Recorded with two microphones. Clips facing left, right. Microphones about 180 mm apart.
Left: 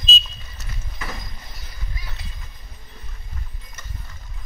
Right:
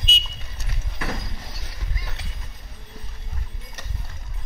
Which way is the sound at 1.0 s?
80° right.